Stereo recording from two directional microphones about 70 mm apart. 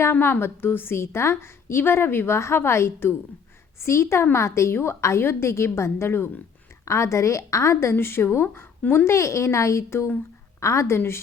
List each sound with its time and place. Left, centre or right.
0.0 s a woman's voice: left
6.8 s a woman's voice: left
8.8 s speech: left
9.0 s a woman's voice: left